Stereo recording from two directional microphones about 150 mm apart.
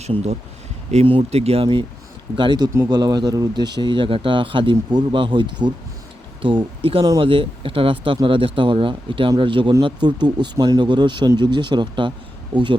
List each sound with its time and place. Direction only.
0.0 s speech: 45° right (ahead or behind)